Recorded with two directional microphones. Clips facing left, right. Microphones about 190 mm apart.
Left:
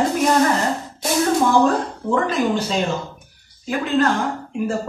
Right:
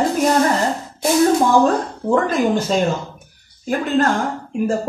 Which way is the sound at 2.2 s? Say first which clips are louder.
Right 2 dB; 45° right (ahead or behind).